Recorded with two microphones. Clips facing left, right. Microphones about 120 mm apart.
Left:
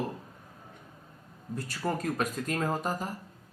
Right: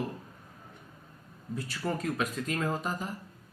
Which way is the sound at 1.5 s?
45° left (ahead or behind).